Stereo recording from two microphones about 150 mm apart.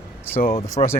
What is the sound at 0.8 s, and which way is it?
Speech, 40° left (ahead or behind).